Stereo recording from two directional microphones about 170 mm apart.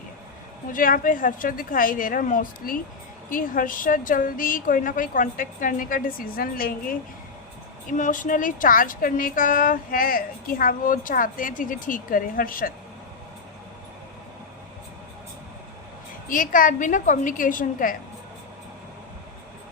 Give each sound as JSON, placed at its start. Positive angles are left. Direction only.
{"t": 0.7, "sound": "a woman's voice", "side_deg": 55}
{"t": 16.3, "sound": "a woman's voice", "side_deg": 50}